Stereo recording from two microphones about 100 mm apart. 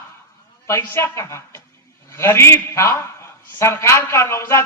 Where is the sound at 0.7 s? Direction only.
30° left (ahead or behind).